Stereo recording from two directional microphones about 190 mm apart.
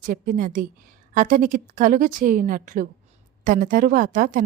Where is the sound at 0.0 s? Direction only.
45° right (ahead or behind).